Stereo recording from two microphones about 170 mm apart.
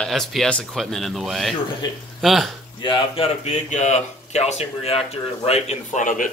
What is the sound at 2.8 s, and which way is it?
Speech, 30° left (ahead or behind).